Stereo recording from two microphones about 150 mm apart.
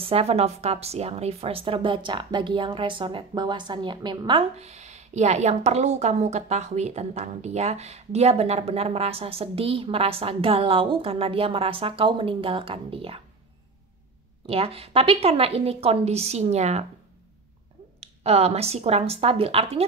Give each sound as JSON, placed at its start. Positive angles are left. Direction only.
{"t": 0.0, "sound": "a woman's voice", "side_deg": -40}
{"t": 14.4, "sound": "a woman's voice", "side_deg": -40}
{"t": 18.0, "sound": "a woman's voice", "side_deg": -45}